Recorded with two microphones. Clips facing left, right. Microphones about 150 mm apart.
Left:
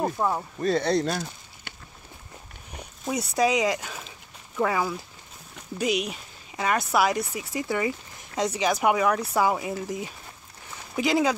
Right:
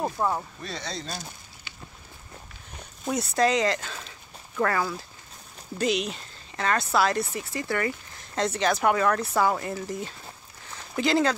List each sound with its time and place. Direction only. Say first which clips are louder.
0.0 s speech: left 1 dB; centre (ahead or behind)
0.6 s speech: left 13 dB; 50° left (ahead or behind)
3.1 s speech: even; 10° left (ahead or behind)